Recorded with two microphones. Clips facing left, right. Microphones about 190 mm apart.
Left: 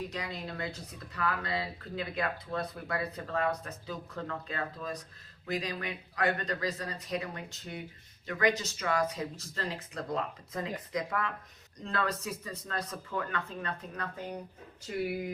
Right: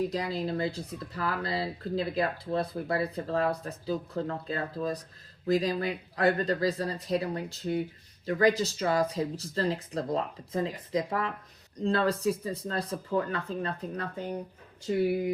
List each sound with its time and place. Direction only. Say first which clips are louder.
0.1 s speech: right 8 dB; 35° right (ahead or behind)